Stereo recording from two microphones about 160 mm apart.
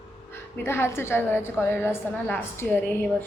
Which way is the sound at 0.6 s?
15° left (ahead or behind).